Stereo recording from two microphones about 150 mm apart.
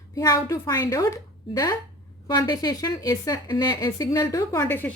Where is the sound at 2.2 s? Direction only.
25° left (ahead or behind).